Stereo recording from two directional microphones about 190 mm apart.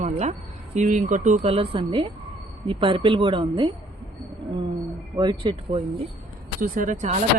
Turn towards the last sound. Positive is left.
turn(degrees=-40)  # may be behind; listen again after turning